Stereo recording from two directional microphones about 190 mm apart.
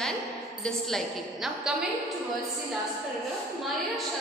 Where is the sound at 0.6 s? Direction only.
Centre (ahead or behind).